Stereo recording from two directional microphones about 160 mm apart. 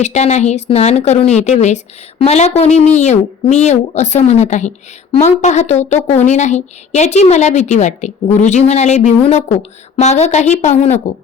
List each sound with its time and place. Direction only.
0.0 s speech: 45° left (ahead or behind)